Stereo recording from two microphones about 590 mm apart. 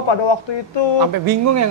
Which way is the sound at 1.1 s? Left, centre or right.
Right.